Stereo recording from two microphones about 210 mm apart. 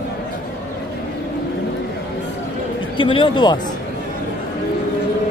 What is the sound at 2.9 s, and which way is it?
Speech, 25° left (ahead or behind).